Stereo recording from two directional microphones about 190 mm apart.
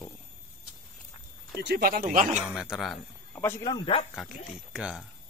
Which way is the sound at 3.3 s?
15° left (ahead or behind).